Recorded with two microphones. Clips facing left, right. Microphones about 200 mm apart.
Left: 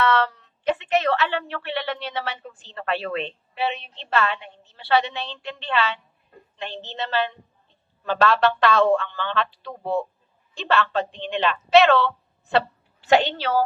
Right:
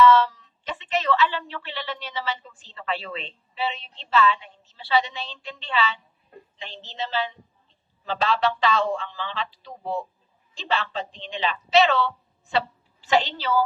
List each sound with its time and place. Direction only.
0.0 s a woman's voice: 60° left (ahead or behind)